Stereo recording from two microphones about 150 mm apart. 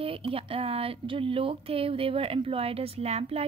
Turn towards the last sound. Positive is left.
turn(degrees=-45)  # may be behind; listen again after turning